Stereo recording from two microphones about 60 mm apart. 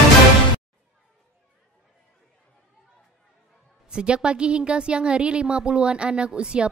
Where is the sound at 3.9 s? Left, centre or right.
Centre.